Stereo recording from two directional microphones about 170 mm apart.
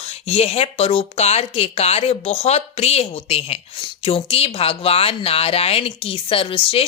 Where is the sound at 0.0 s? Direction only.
35° left (ahead or behind).